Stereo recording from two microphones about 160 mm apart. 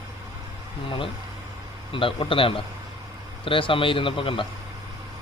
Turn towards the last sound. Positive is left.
turn(degrees=35)  # may be behind; listen again after turning